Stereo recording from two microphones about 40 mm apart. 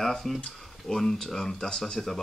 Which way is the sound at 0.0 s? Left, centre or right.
Centre.